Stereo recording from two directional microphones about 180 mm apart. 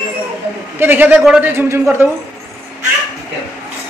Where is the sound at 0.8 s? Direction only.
10° right (ahead or behind).